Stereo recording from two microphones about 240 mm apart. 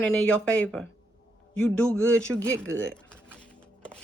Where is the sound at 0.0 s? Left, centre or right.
Centre.